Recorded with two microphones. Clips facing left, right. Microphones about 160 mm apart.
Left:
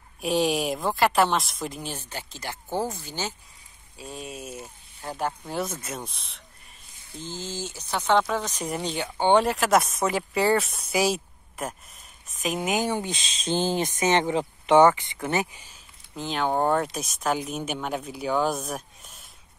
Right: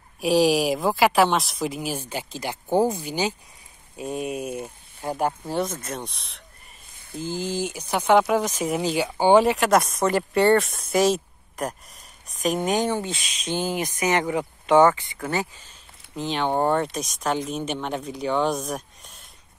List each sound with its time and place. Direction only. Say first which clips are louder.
0.2 s speech: right 5 dB; centre (ahead or behind)
4.4 s speech: right 8 dB; 55° right (ahead or behind)
5.5 s speech: right 4 dB; centre (ahead or behind)
7.2 s speech: right 7 dB; 10° right (ahead or behind); by 13.2 s 15° left (ahead or behind)
13.2 s speech: left 1 dB; 30° left (ahead or behind); by 15.8 s 15° left (ahead or behind)
16.2 s speech: right 2 dB; centre (ahead or behind)